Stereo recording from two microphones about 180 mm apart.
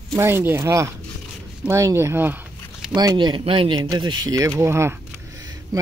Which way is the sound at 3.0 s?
25° right (ahead or behind).